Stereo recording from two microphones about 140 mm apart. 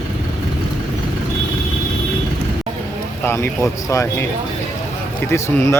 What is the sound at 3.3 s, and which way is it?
Speech, 20° left (ahead or behind).